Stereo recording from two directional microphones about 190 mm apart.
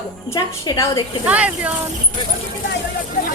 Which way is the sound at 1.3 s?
5° right (ahead or behind).